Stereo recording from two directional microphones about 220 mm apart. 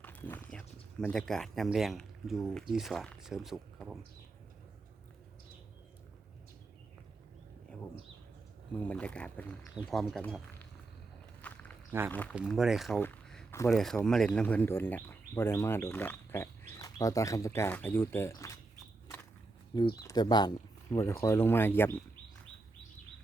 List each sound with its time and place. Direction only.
0.0 s speech: 10° left (ahead or behind)
8.8 s speech: 5° left (ahead or behind)
11.4 s walk: 5° left (ahead or behind)
11.9 s speech: 10° right (ahead or behind)
13.0 s a sound: 10° left (ahead or behind)
13.7 s speech: centre (ahead or behind)
20.0 s speech: 15° left (ahead or behind)